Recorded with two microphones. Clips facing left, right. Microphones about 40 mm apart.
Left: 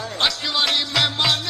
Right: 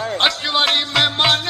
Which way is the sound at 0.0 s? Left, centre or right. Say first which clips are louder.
Right 4 dB; right.